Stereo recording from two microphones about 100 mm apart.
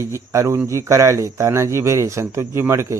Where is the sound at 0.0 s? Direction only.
30° right (ahead or behind).